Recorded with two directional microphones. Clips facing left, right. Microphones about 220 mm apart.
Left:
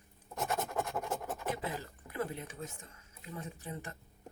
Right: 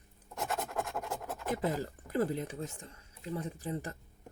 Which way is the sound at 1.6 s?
40° right (ahead or behind).